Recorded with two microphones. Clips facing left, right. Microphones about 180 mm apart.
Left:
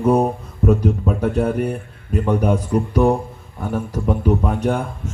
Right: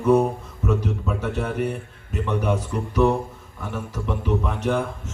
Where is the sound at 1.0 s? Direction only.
50° left (ahead or behind).